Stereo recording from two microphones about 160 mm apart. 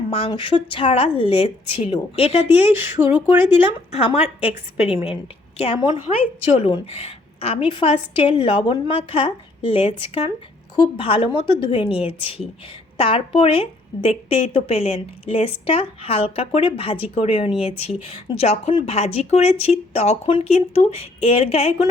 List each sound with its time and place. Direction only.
0.1 s a woman's voice: 35° left (ahead or behind)